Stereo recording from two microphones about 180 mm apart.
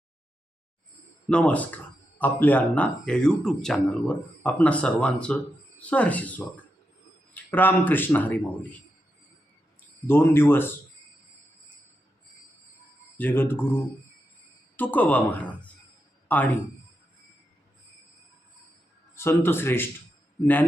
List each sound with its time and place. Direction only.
1.3 s speech: 5° left (ahead or behind)
10.1 s speech: 10° left (ahead or behind)
13.1 s speech: 10° left (ahead or behind)
14.8 s speech: 10° left (ahead or behind)
19.1 s speech: 15° left (ahead or behind)